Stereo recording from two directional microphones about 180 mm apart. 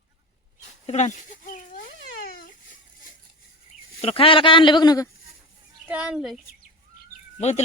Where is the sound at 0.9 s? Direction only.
40° left (ahead or behind).